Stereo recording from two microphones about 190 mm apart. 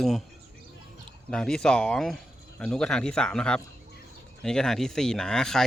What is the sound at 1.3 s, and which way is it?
Speech, 5° left (ahead or behind).